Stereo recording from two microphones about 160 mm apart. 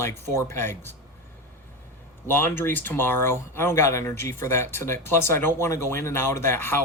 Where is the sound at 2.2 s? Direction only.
15° left (ahead or behind).